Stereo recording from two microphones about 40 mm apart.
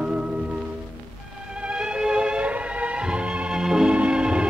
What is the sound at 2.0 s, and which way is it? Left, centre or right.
Music, centre.